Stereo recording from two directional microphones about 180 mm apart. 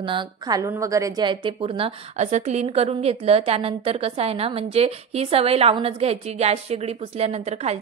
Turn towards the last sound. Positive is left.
turn(degrees=-35)  # may be behind; listen again after turning